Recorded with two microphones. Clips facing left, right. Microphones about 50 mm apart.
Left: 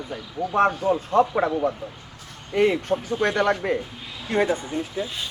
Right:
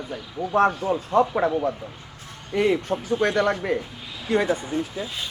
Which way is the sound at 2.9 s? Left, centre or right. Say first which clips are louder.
Left 2 dB; right.